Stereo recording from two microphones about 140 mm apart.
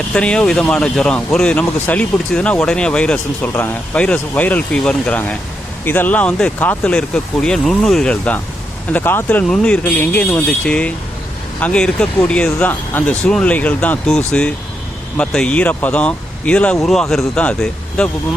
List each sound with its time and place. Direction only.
0.1 s speech: 5° left (ahead or behind)